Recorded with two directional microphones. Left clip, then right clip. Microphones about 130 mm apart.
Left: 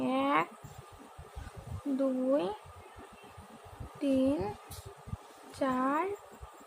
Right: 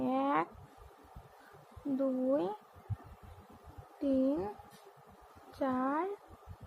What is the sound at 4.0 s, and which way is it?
Speech, 25° right (ahead or behind).